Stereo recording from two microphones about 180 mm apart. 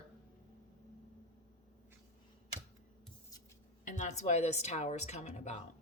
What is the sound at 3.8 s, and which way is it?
A woman's voice, 40° left (ahead or behind).